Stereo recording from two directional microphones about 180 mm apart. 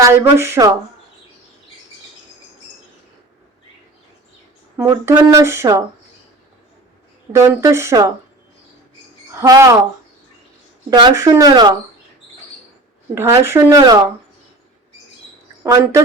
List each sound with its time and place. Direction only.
0.0 s speech: 15° right (ahead or behind)
4.8 s speech: 15° right (ahead or behind)
7.3 s speech: 15° right (ahead or behind)
9.3 s speech: 15° right (ahead or behind)
10.8 s speech: 20° right (ahead or behind)
13.1 s speech: 15° right (ahead or behind)
15.6 s speech: 15° right (ahead or behind)